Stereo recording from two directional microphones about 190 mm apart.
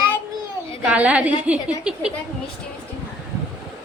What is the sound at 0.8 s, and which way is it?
A woman's voice, 5° right (ahead or behind).